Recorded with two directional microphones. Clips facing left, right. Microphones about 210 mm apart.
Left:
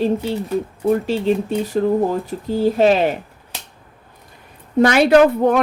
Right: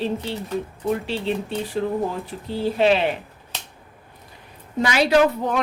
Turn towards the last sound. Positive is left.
turn(degrees=55)  # may be behind; listen again after turning